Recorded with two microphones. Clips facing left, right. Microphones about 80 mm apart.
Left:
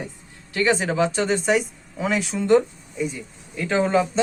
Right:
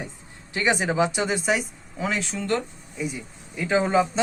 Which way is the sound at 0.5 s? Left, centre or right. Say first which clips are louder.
Left 2 dB; centre.